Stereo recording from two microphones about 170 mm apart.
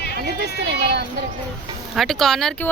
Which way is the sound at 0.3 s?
70° right (ahead or behind).